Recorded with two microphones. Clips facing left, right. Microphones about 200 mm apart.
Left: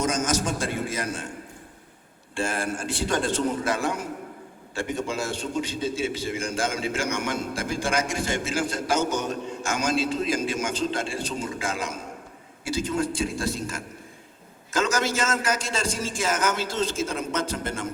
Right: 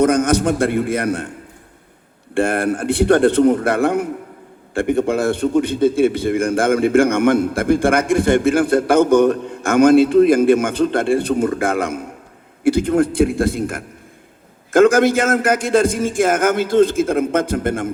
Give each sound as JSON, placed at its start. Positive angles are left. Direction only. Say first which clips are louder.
{"t": 0.0, "sound": "a man's voice", "louder": "right 11 dB", "side_deg": -60}
{"t": 2.3, "sound": "a man's voice", "louder": "right 11 dB", "side_deg": -60}